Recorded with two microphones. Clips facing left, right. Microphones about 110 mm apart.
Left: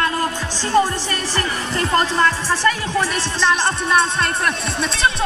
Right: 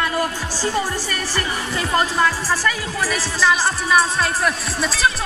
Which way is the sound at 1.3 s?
10° right (ahead or behind).